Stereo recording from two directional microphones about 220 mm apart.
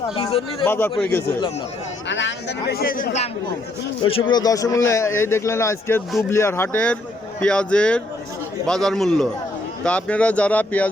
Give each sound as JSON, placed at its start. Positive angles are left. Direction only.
{"t": 0.6, "sound": "speech", "side_deg": 10}
{"t": 2.0, "sound": "speech", "side_deg": 55}
{"t": 4.3, "sound": "speech", "side_deg": 20}